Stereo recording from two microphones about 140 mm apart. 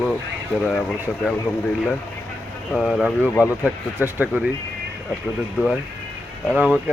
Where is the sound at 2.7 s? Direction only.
5° right (ahead or behind).